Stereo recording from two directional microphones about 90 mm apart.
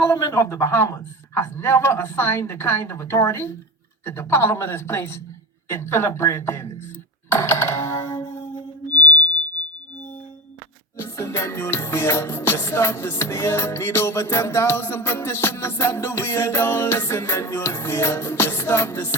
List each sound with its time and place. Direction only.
0.0 s music: 30° left (ahead or behind)
7.3 s a sound: 25° left (ahead or behind)
11.0 s music: 30° left (ahead or behind)